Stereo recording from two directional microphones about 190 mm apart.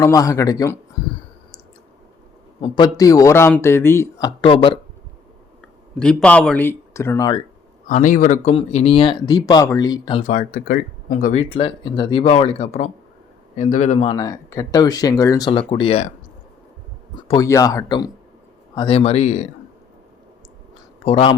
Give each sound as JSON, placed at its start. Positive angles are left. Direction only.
{"t": 0.0, "sound": "speech", "side_deg": 15}
{"t": 2.6, "sound": "speech", "side_deg": 25}
{"t": 6.0, "sound": "speech", "side_deg": 5}
{"t": 7.9, "sound": "speech", "side_deg": 40}
{"t": 8.5, "sound": "speech", "side_deg": 30}
{"t": 10.2, "sound": "speech", "side_deg": 45}
{"t": 17.2, "sound": "speech", "side_deg": 25}
{"t": 21.0, "sound": "speech", "side_deg": 30}